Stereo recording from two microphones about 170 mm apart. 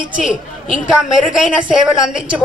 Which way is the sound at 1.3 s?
5° right (ahead or behind).